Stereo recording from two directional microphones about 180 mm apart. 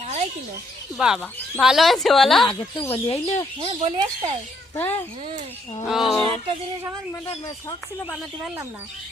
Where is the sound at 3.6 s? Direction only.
30° right (ahead or behind).